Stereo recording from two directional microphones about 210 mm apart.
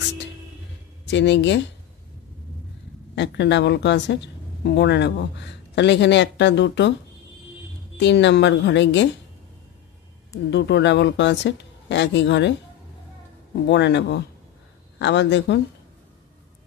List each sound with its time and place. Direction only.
1.0 s speech: 55° left (ahead or behind)
3.2 s speech: 55° left (ahead or behind)
8.0 s speech: 55° left (ahead or behind)
10.5 s speech: 55° left (ahead or behind)
13.7 s speech: 55° left (ahead or behind)